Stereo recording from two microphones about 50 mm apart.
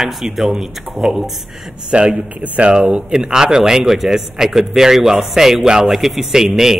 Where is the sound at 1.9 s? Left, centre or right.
Right.